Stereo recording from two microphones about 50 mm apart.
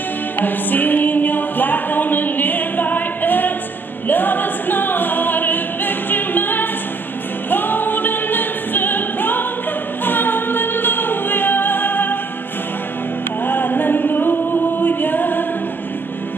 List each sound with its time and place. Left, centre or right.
0.4 s music: left
4.1 s a capella: left
7.4 s music: left
13.5 s music: left
14.8 s a capella: left